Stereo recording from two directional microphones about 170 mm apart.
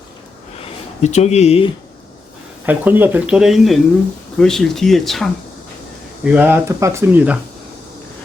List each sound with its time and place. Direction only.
0.6 s speech: 40° left (ahead or behind)
2.6 s speech: 10° right (ahead or behind)
6.3 s speech: 10° right (ahead or behind)